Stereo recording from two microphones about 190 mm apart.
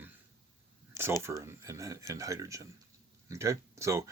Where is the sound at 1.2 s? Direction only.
15° right (ahead or behind).